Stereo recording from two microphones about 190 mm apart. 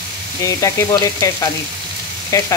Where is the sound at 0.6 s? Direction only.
15° left (ahead or behind).